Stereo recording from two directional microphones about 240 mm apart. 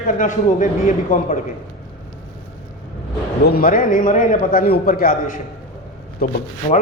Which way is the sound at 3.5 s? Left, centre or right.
Left.